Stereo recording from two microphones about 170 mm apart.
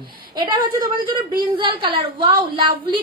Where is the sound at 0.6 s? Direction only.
25° right (ahead or behind).